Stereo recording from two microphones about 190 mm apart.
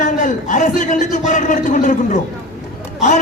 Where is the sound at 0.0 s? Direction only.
40° left (ahead or behind).